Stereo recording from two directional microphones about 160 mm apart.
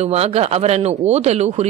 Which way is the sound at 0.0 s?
40° right (ahead or behind).